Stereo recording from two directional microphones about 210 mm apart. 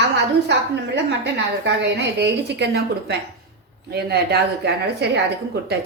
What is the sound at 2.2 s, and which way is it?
A woman's voice, 55° right (ahead or behind).